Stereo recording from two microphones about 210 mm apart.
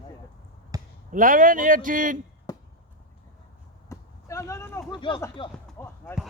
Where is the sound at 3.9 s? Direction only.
15° left (ahead or behind).